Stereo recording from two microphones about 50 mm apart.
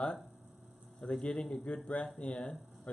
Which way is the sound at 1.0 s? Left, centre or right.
Left.